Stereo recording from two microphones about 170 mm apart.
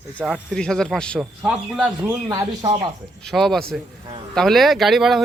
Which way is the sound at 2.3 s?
20° right (ahead or behind).